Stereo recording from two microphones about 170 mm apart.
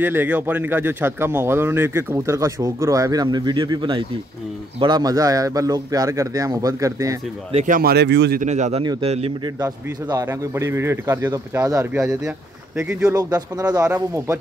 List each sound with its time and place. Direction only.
0.0 s a man's voice: 10° right (ahead or behind)
7.5 s speech: 50° right (ahead or behind); by 8.4 s 85° right
8.4 s a man's voice: 45° right (ahead or behind)
9.6 s speech: 20° right (ahead or behind)
11.9 s speech: 5° right (ahead or behind)
13.1 s a man's voice: 20° right (ahead or behind)